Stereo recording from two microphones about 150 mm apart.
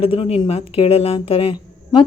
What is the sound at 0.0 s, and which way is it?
Speech, 40° left (ahead or behind).